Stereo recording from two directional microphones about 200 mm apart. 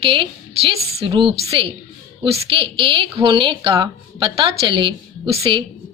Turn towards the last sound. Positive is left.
turn(degrees=-25)  # may be behind; listen again after turning